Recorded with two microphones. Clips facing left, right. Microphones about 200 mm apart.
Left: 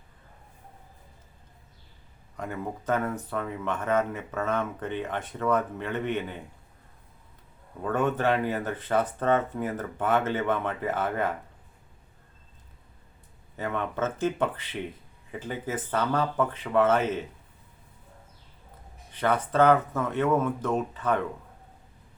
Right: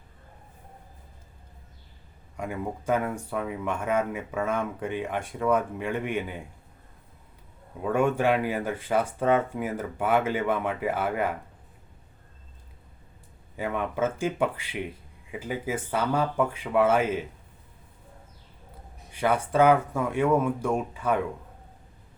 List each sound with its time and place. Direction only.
2.3 s speech: 10° right (ahead or behind)
7.8 s speech: 10° right (ahead or behind)
13.6 s speech: 10° right (ahead or behind)
19.1 s speech: 10° right (ahead or behind)